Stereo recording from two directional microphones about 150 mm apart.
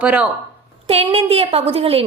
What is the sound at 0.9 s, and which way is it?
A woman's voice, 40° right (ahead or behind).